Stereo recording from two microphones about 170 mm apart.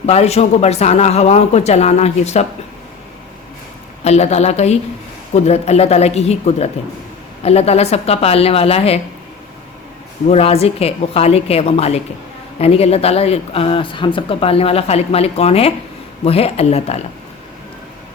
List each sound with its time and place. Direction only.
0.0 s speech: 40° left (ahead or behind)
4.0 s speech: 40° left (ahead or behind)
10.2 s speech: 40° left (ahead or behind)